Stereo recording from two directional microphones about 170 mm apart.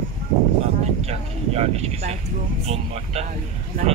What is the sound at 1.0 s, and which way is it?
Speech, 40° right (ahead or behind).